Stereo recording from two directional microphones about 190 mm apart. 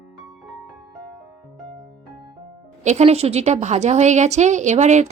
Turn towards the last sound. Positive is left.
turn(degrees=-40)  # may be behind; listen again after turning